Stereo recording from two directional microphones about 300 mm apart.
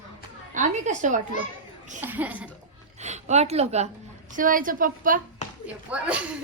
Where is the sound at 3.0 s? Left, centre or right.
Right.